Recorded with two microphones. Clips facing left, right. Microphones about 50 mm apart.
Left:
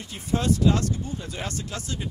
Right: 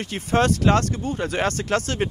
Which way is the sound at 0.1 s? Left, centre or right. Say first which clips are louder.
Right 4 dB; right.